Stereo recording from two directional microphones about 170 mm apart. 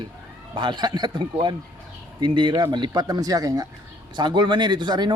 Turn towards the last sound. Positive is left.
turn(degrees=-25)  # may be behind; listen again after turning